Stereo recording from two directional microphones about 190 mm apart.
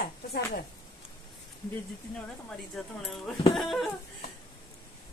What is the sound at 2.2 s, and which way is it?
Speech, 5° left (ahead or behind).